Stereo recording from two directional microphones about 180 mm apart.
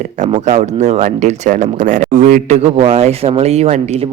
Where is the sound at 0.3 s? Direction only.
40° right (ahead or behind).